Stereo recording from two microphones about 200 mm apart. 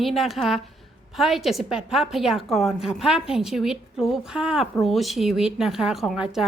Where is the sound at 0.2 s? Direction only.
Centre (ahead or behind).